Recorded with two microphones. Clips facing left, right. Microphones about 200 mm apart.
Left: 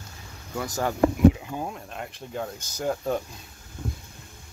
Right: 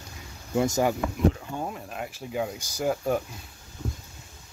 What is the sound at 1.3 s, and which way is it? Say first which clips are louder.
Speech: even; centre (ahead or behind).